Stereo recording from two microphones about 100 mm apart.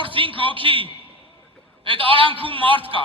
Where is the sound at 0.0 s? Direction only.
60° right (ahead or behind).